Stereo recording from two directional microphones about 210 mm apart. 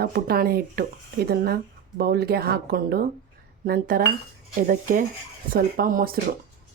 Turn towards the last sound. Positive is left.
turn(degrees=-45)  # may be behind; listen again after turning